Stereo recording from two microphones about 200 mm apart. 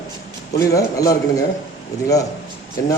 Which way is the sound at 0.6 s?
15° left (ahead or behind).